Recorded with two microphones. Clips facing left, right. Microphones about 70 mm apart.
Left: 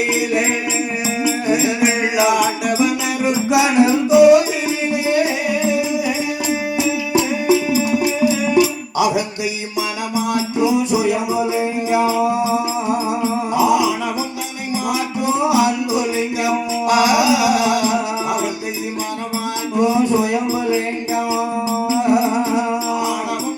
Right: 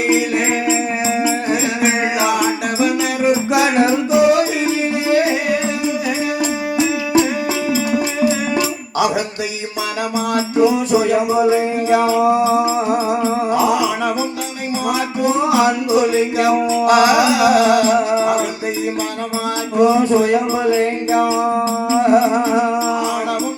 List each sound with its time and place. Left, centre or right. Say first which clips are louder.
1.2 s music: even; right
12.5 s music: right 3 dB; right
15.2 s music: right 1 dB; right
19.7 s music: right 3 dB; right
20.7 s music: right 4 dB; right